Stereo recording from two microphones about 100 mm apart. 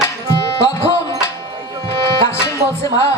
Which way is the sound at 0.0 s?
25° left (ahead or behind).